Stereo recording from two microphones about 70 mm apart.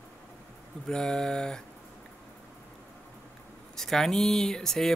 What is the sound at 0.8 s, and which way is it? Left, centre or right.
Speech, centre.